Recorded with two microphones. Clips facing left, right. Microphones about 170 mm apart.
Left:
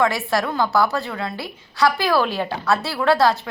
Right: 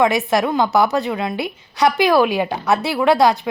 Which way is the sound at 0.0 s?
20° right (ahead or behind).